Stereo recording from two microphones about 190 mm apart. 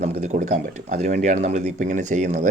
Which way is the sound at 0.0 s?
35° right (ahead or behind).